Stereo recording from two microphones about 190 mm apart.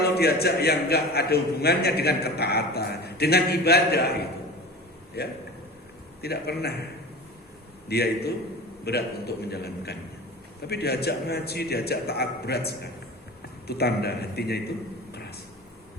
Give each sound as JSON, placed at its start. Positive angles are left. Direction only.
{"t": 0.0, "sound": "a man's voice", "side_deg": 55}
{"t": 5.2, "sound": "a man's voice", "side_deg": 60}
{"t": 7.9, "sound": "a man's voice", "side_deg": 60}